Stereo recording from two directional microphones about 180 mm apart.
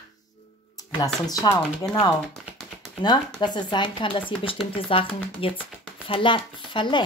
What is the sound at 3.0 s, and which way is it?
Speech, 25° left (ahead or behind).